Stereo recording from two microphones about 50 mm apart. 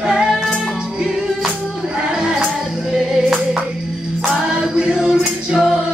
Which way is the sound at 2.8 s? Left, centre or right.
Centre.